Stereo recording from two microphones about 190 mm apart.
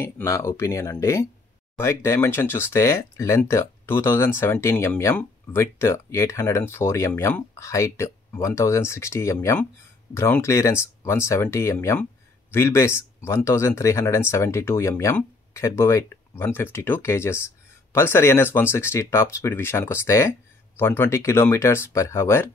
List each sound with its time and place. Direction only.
0.0 s speech: 15° left (ahead or behind)